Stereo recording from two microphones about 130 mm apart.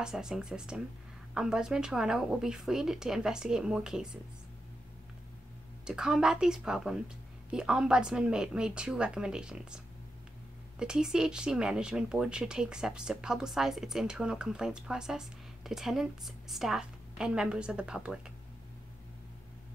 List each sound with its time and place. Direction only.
0.0 s speech: 5° right (ahead or behind)
5.9 s speech: 5° right (ahead or behind)
10.8 s speech: 5° right (ahead or behind)